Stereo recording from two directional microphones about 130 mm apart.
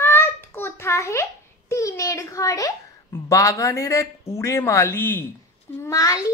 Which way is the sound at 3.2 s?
25° left (ahead or behind).